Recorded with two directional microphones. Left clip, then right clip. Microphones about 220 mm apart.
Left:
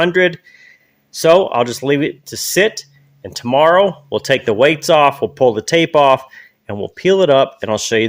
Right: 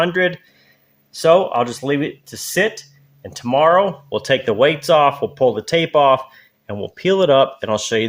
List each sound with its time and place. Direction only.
1.1 s speech: 40° left (ahead or behind)